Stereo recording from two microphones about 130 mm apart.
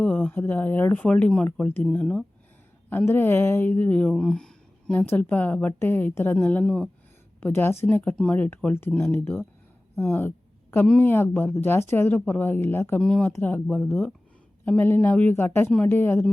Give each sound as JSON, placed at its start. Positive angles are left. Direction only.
{"t": 0.0, "sound": "speech", "side_deg": 15}
{"t": 7.4, "sound": "speech", "side_deg": 15}
{"t": 9.9, "sound": "a sound", "side_deg": 15}
{"t": 10.8, "sound": "speech", "side_deg": 15}
{"t": 13.0, "sound": "speech", "side_deg": 5}